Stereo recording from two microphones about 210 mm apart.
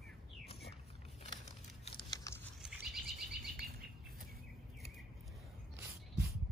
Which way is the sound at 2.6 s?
Centre (ahead or behind).